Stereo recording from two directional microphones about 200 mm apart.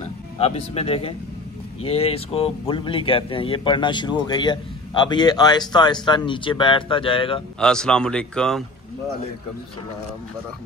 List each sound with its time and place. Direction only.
0.0 s speech: 30° left (ahead or behind)
7.6 s speech: 5° left (ahead or behind)